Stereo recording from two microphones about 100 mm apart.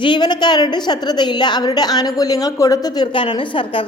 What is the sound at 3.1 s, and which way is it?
Speech, 55° left (ahead or behind).